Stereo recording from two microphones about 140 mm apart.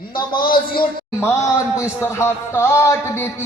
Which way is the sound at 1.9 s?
20° left (ahead or behind).